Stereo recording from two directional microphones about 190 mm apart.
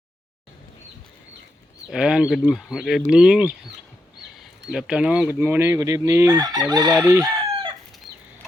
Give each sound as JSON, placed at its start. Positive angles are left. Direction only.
{"t": 1.9, "sound": "speech", "side_deg": -5}
{"t": 4.7, "sound": "fowl", "side_deg": -5}
{"t": 6.7, "sound": "chicken", "side_deg": -20}